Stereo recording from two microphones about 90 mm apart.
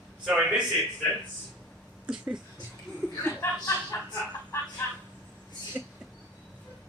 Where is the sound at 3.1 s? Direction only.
30° left (ahead or behind).